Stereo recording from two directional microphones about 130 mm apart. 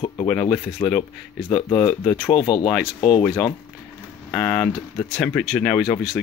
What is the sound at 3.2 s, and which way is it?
Speech, 20° left (ahead or behind).